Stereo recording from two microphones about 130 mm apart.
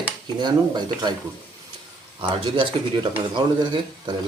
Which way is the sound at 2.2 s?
40° right (ahead or behind).